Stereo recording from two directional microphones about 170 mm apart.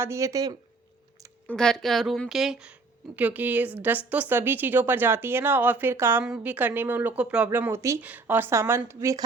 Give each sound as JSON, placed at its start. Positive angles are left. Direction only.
{"t": 0.0, "sound": "speech", "side_deg": -15}
{"t": 1.5, "sound": "a woman's voice", "side_deg": 5}